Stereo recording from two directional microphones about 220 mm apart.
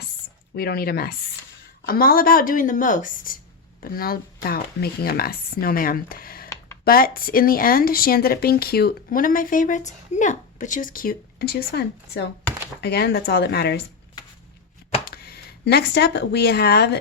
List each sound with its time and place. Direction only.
0.5 s speech: 45° left (ahead or behind)
15.1 s speech: 45° left (ahead or behind)